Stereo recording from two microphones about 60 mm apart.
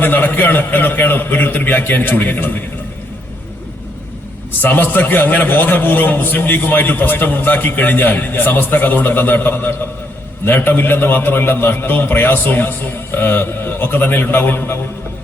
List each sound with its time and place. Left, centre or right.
0.0 s a man's voice: left
4.6 s a man's voice: left